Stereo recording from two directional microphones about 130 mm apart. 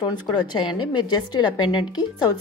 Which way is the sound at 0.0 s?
35° left (ahead or behind).